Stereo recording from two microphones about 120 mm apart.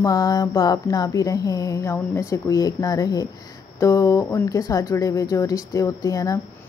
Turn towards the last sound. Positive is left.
turn(degrees=30)  # may be behind; listen again after turning